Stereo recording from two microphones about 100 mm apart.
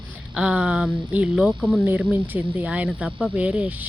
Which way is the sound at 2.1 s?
20° right (ahead or behind).